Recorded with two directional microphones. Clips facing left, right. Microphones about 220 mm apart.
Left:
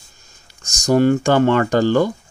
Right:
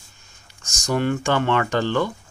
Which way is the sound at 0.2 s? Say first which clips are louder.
Left 2 dB; 40° left (ahead or behind).